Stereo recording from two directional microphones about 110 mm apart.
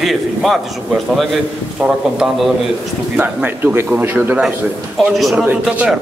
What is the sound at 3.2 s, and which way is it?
A man's voice, 20° right (ahead or behind).